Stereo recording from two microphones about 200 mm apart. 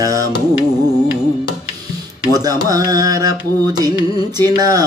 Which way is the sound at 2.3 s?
20° right (ahead or behind).